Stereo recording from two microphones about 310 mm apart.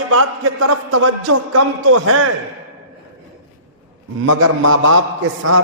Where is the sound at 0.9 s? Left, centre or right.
Right.